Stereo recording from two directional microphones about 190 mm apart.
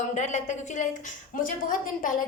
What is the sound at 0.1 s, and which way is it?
A woman's voice, 40° left (ahead or behind).